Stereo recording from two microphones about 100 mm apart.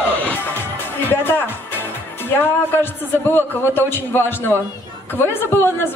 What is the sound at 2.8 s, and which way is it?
A man's voice, 20° left (ahead or behind).